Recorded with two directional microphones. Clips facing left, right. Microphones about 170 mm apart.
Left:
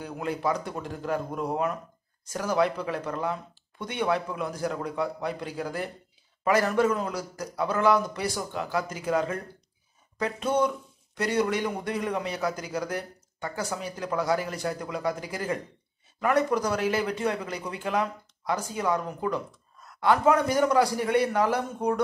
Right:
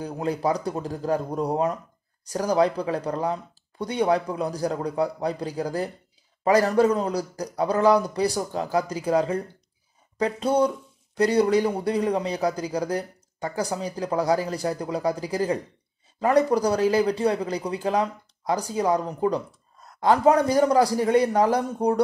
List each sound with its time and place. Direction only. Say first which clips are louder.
0.0 s a man's voice: right 4 dB; 35° right (ahead or behind)